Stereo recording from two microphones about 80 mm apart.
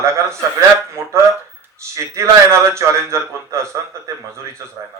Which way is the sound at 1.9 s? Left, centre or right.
Right.